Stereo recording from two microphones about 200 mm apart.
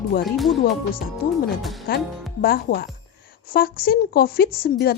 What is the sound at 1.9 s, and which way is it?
Speech, 45° left (ahead or behind).